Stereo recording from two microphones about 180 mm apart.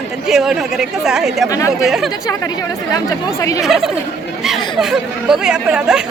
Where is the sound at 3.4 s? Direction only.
15° left (ahead or behind).